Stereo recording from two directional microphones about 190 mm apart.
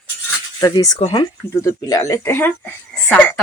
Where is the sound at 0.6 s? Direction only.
20° left (ahead or behind).